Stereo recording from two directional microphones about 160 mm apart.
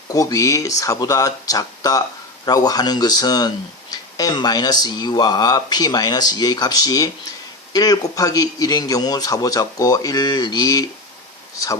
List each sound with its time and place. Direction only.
0.1 s speech: 20° left (ahead or behind)